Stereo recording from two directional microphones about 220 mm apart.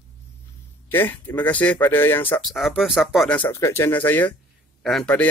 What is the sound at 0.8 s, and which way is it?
Speech, 10° left (ahead or behind).